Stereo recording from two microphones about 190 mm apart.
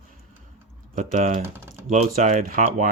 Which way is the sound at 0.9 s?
40° right (ahead or behind).